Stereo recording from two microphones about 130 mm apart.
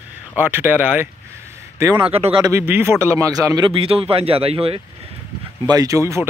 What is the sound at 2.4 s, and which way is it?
Speech, 20° right (ahead or behind).